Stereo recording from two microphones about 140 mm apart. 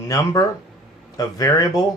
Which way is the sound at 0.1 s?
25° left (ahead or behind).